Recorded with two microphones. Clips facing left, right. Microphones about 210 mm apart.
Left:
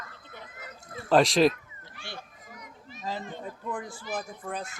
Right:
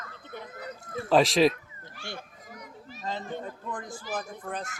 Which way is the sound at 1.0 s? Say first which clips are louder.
Even; centre (ahead or behind).